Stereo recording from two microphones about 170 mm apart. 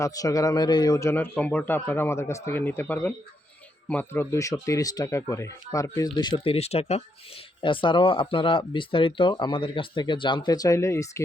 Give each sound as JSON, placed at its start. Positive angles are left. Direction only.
{"t": 0.0, "sound": "a man's voice", "side_deg": 20}